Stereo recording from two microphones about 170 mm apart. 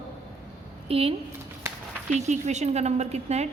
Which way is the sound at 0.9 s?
35° right (ahead or behind).